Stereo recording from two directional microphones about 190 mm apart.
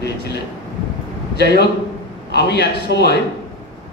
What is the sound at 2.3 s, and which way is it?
Speech, 60° left (ahead or behind).